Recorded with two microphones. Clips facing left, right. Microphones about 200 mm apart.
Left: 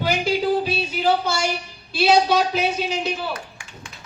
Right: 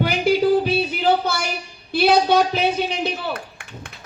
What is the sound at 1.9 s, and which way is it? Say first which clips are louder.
Speech: right 1 dB; 55° right (ahead or behind).